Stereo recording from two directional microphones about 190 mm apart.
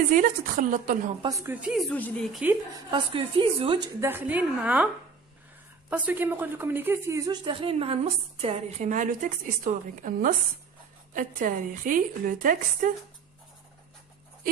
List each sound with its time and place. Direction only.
0.1 s a woman's voice: 45° right (ahead or behind)
1.2 s a woman's voice: 15° right (ahead or behind)
1.9 s a woman's voice: 10° left (ahead or behind)
2.9 s a woman's voice: 25° right (ahead or behind)
4.1 s a woman's voice: 10° right (ahead or behind)
5.9 s a woman's voice: 10° right (ahead or behind); by 12.9 s 45° right (ahead or behind)